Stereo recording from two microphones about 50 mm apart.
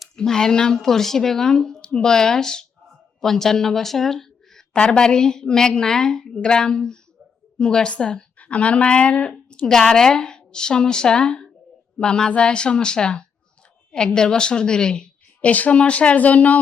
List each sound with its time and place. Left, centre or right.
0.2 s a woman's voice: centre; by 16.6 s left